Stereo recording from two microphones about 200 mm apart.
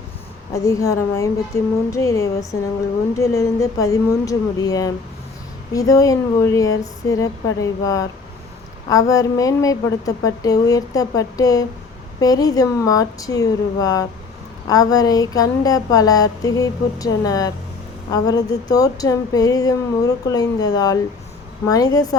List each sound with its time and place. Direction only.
0.5 s speech: 15° left (ahead or behind)